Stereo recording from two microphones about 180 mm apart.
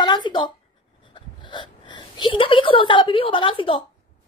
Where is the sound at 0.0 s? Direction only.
25° left (ahead or behind).